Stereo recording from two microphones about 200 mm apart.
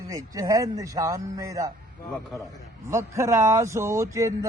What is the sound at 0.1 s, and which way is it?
Speech, 15° right (ahead or behind).